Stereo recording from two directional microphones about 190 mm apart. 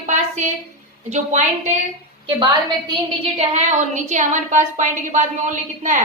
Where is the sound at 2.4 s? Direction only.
25° right (ahead or behind).